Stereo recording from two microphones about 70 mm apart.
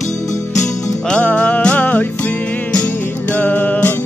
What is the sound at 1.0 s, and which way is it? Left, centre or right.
Music, centre.